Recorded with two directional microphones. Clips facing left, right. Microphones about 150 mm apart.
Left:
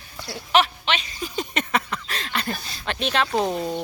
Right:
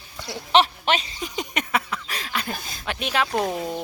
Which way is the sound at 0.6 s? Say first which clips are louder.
Right 2 dB; 35° right (ahead or behind).